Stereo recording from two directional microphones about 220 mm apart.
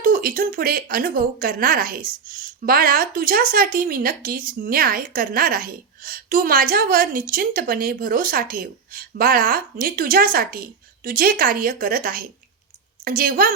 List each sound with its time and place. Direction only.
0.0 s speech: 40° right (ahead or behind)